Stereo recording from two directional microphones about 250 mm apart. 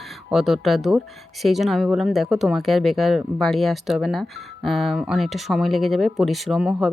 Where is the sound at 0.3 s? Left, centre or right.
Centre.